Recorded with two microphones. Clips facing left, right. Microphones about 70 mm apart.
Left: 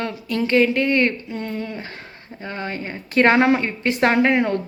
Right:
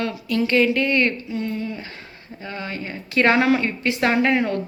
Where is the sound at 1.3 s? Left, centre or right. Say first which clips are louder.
Right 1 dB; left.